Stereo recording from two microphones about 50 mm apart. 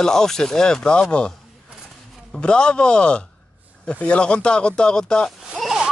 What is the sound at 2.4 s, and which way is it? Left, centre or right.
Speech, centre.